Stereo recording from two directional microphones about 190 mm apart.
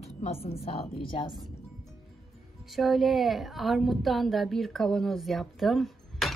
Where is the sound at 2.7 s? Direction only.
Centre (ahead or behind).